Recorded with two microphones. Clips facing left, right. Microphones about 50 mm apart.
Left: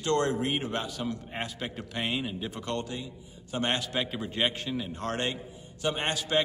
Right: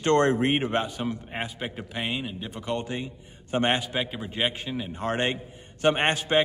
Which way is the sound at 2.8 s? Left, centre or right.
Right.